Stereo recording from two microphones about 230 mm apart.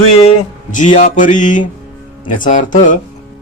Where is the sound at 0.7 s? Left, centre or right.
Left.